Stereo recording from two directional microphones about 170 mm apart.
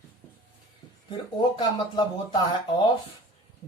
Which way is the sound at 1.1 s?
30° left (ahead or behind).